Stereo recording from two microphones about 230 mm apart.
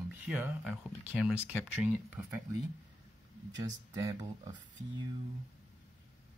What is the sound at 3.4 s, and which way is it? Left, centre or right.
Speech, centre.